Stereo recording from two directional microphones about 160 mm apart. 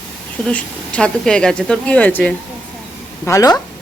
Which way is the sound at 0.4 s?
10° left (ahead or behind).